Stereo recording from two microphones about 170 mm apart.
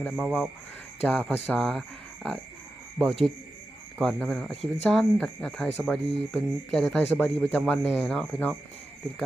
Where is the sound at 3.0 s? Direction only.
Centre (ahead or behind).